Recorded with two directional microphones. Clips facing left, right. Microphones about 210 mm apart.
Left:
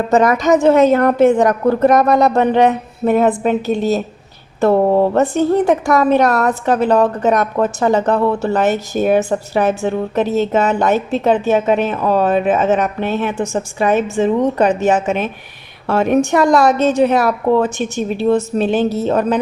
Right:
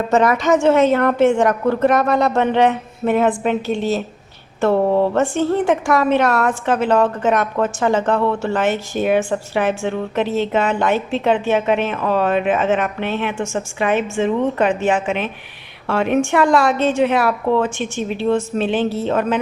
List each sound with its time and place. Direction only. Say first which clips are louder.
0.1 s a woman's voice: left 3 dB; 40° left (ahead or behind)